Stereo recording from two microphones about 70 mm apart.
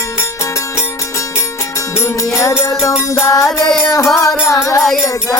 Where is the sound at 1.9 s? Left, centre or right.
Left.